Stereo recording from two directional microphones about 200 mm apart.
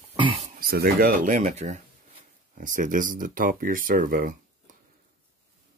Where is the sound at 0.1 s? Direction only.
25° right (ahead or behind).